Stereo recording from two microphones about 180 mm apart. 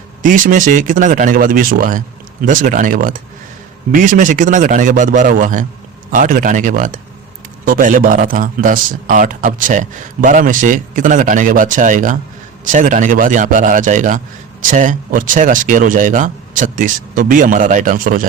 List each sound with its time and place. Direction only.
0.2 s a man's voice: 50° right (ahead or behind)